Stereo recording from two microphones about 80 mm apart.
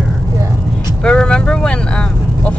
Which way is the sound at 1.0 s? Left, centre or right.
Centre.